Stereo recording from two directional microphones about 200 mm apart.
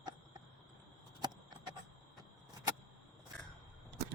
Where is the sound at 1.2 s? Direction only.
20° right (ahead or behind).